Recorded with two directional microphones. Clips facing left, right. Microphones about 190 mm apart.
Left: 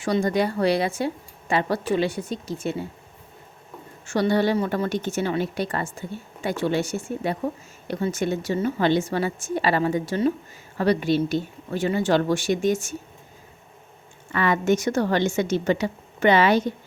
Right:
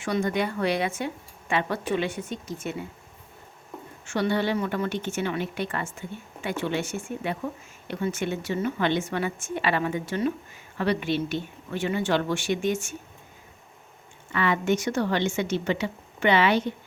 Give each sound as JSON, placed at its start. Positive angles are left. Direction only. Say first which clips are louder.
{"t": 0.0, "sound": "a woman's voice", "louder": "left 4 dB", "side_deg": 35}
{"t": 4.0, "sound": "a woman's voice", "louder": "left 4 dB", "side_deg": 40}
{"t": 14.3, "sound": "a woman's voice", "louder": "left 3 dB", "side_deg": 45}